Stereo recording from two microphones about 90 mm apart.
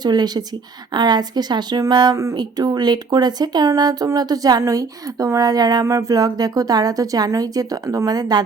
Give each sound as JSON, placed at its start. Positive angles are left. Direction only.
{"t": 0.0, "sound": "a woman's voice", "side_deg": -50}
{"t": 5.8, "sound": "a woman's voice", "side_deg": -35}